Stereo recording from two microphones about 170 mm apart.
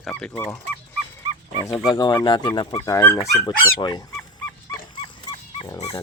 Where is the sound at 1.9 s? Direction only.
25° left (ahead or behind).